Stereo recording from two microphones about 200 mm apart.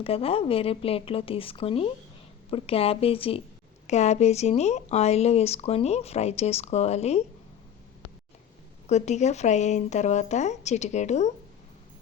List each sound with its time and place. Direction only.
0.0 s speech: 30° left (ahead or behind)
8.9 s speech: 35° left (ahead or behind)